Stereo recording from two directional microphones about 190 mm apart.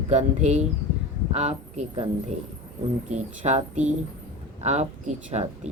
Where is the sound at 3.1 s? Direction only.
40° right (ahead or behind).